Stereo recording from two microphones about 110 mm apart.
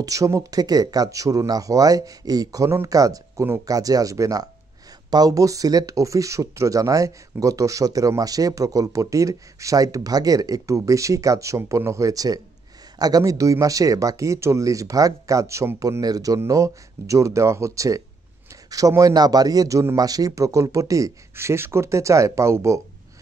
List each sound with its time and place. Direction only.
0.0 s speech: 30° right (ahead or behind)